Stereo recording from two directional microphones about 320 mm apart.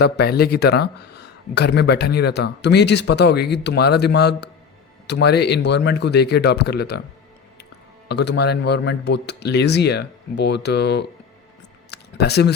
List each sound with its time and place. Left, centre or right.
0.0 s speech: left
8.0 s speech: left
11.9 s a sound: left